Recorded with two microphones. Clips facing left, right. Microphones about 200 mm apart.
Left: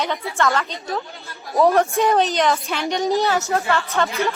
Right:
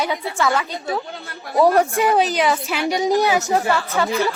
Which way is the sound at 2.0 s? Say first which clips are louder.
Even; 5° right (ahead or behind).